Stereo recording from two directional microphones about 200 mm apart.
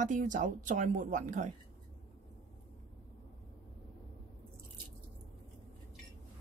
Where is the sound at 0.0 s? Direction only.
40° right (ahead or behind).